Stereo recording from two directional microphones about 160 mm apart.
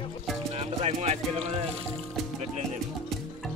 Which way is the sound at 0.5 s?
40° right (ahead or behind).